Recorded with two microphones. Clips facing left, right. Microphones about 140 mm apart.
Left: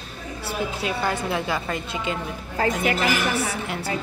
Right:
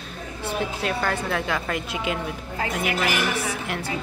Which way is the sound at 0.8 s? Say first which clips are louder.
Even; 10° left (ahead or behind).